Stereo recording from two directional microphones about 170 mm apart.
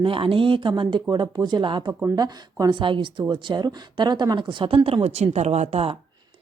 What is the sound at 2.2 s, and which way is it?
A woman's voice, 25° right (ahead or behind).